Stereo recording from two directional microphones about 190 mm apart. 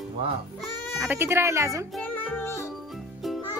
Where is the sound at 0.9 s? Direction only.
5° right (ahead or behind).